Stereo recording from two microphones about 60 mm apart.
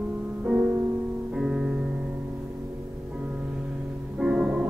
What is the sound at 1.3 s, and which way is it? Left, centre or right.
Music, centre.